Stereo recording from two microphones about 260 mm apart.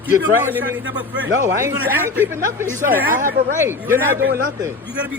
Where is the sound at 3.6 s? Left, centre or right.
Centre.